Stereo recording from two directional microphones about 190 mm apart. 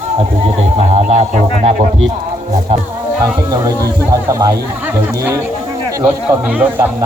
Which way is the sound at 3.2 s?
20° right (ahead or behind).